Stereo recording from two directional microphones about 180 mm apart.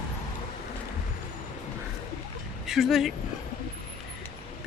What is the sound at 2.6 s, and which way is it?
Speech, centre (ahead or behind).